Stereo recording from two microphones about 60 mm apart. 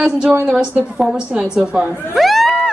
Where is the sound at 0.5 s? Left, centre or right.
Centre.